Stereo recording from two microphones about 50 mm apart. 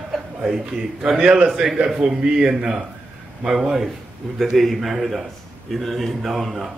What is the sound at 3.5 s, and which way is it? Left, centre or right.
A man's voice, centre.